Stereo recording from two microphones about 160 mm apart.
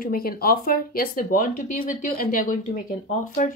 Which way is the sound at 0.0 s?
70° left (ahead or behind).